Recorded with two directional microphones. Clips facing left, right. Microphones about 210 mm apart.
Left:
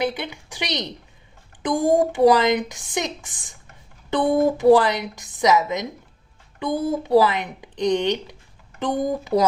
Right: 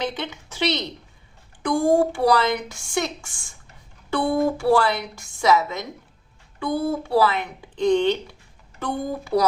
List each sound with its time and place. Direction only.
0.0 s a woman's voice: 10° left (ahead or behind)